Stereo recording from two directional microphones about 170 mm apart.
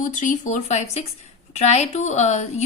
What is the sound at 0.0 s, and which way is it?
A woman's voice, 50° left (ahead or behind).